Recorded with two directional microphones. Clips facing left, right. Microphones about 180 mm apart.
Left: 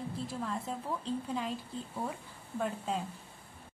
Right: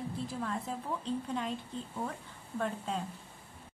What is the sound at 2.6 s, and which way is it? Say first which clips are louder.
Speech: left 1 dB; centre (ahead or behind).